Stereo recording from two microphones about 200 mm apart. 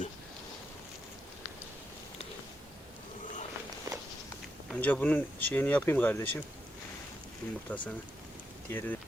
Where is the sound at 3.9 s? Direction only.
15° right (ahead or behind).